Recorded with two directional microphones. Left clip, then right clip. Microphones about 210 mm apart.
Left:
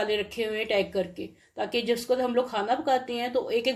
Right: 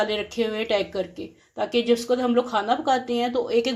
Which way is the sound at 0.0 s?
25° right (ahead or behind).